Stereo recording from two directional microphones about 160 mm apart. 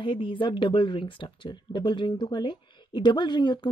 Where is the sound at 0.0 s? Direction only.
30° left (ahead or behind).